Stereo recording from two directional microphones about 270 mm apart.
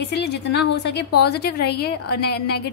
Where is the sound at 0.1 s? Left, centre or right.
Left.